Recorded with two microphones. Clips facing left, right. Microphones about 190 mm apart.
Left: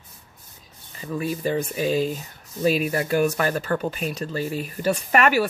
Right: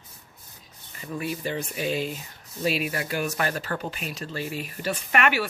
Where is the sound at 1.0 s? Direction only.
35° left (ahead or behind).